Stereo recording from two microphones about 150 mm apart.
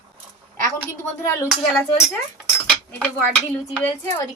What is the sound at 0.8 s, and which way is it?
Speech, 15° left (ahead or behind).